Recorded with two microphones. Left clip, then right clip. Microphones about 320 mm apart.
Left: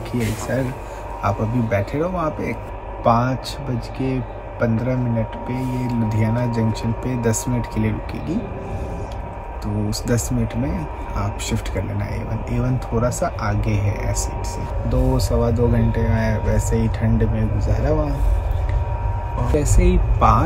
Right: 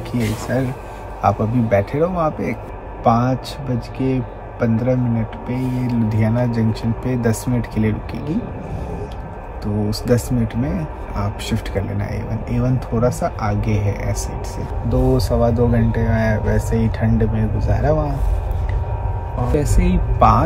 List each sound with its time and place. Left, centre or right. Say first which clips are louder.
1.2 s speech: right 5 dB; centre
9.8 s speech: right 5 dB; centre
19.6 s speech: left 1 dB; centre